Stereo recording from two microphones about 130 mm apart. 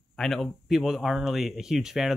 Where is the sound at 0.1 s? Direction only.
Centre (ahead or behind).